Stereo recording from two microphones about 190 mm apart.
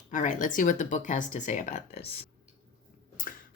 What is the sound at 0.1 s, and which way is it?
Speech, 40° left (ahead or behind).